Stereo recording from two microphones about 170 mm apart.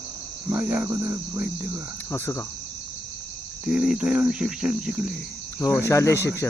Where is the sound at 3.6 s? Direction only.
5° right (ahead or behind).